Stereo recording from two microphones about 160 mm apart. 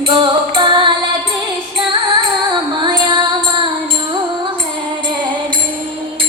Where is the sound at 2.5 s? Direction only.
30° right (ahead or behind).